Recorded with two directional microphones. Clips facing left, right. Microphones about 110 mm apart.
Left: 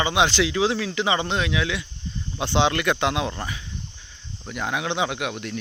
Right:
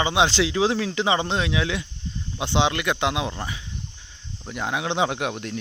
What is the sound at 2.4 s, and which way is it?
Speech, 15° right (ahead or behind).